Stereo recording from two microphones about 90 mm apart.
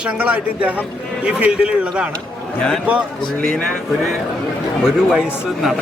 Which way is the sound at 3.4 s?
10° left (ahead or behind).